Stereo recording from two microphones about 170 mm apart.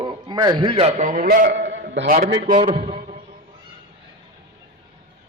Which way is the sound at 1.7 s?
80° right.